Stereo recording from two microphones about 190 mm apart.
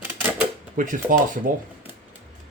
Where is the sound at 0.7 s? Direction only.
45° right (ahead or behind).